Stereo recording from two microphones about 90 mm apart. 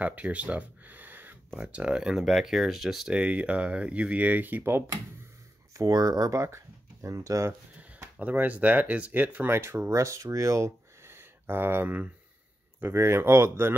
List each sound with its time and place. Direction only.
0.0 s speech: 15° right (ahead or behind)
5.8 s speech: 45° right (ahead or behind)
8.2 s speech: 15° right (ahead or behind)